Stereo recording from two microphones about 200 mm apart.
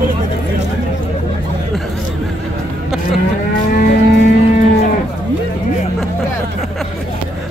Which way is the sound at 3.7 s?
50° left (ahead or behind).